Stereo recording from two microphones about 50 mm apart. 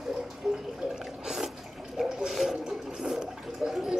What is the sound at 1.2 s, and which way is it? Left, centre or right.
Water, centre.